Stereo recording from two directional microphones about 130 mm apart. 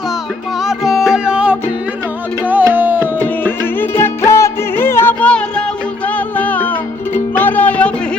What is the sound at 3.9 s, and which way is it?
Music, 20° left (ahead or behind).